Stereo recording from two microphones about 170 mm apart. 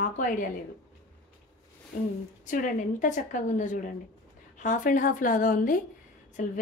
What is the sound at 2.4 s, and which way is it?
Speech, 50° left (ahead or behind).